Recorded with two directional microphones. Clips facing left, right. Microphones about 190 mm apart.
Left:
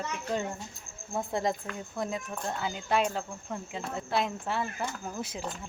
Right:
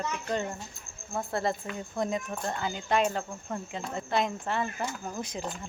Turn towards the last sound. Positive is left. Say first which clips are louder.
# right 1 dB
turn(degrees=5)  # may be behind; listen again after turning